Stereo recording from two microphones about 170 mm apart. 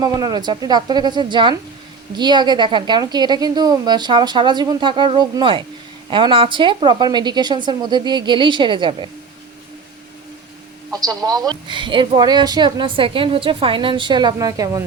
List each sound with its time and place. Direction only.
0.0 s speech: 20° right (ahead or behind)
10.9 s speech: 20° right (ahead or behind)